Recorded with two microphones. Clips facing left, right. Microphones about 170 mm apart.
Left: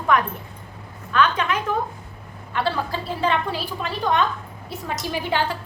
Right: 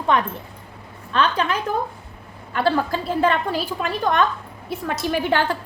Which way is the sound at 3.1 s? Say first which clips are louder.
Right 3 dB; 50° right (ahead or behind).